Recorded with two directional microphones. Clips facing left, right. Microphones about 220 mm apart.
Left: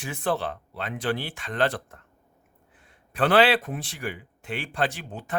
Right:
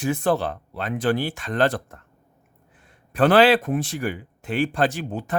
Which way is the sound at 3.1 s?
45° right (ahead or behind).